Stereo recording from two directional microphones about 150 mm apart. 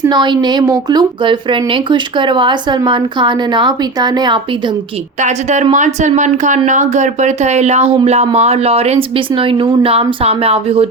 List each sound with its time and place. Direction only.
0.1 s a woman's voice: 30° right (ahead or behind)
5.2 s speech: 55° right (ahead or behind)